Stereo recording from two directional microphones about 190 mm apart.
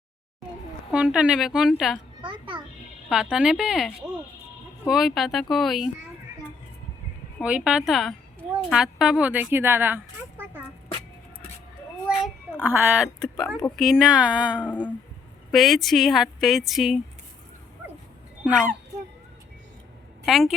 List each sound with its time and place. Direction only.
0.9 s a woman's voice: 5° right (ahead or behind)
2.2 s a child's voice: 25° right (ahead or behind)
3.1 s a woman's voice: 5° right (ahead or behind)
4.9 s a woman's voice: centre (ahead or behind)
7.4 s a woman's voice: 5° right (ahead or behind)
12.0 s a child's voice: 10° right (ahead or behind)
20.2 s a woman's voice: centre (ahead or behind)